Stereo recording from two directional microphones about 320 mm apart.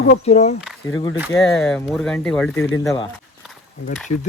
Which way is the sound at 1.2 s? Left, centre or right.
Centre.